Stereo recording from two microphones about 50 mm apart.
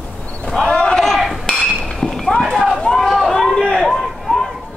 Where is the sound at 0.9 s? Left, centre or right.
Centre.